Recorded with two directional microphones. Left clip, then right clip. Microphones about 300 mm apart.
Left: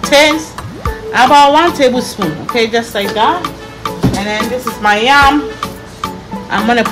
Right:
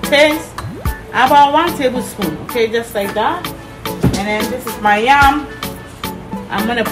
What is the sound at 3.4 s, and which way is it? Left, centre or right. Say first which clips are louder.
Music: left 5 dB; centre.